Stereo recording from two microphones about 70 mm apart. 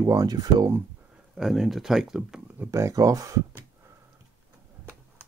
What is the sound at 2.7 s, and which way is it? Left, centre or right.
Speech, right.